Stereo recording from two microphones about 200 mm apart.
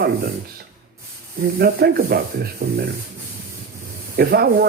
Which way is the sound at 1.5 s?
50° right (ahead or behind).